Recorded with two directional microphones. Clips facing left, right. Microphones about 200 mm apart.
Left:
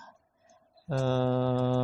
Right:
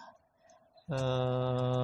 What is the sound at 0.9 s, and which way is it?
Speech, 55° left (ahead or behind).